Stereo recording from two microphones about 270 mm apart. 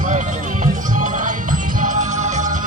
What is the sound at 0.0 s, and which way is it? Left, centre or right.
Music, right.